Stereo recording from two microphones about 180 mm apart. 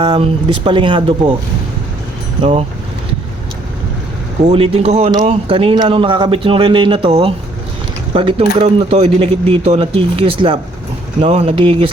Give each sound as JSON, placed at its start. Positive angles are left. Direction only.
{"t": 0.0, "sound": "a man's voice", "side_deg": -30}
{"t": 2.4, "sound": "speech", "side_deg": -35}
{"t": 4.4, "sound": "a man's voice", "side_deg": -30}